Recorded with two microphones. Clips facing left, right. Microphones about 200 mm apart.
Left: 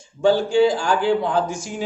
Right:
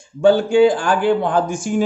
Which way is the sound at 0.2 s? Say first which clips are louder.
Right 4 dB; 55° right (ahead or behind).